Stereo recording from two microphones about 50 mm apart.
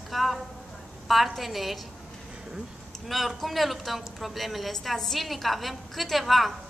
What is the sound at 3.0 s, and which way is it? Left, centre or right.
A woman's voice, centre.